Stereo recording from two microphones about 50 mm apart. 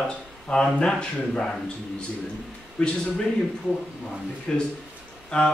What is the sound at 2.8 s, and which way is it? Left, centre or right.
Speech, left.